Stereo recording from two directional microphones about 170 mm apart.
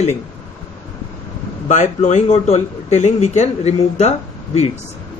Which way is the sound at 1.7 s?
45° left (ahead or behind).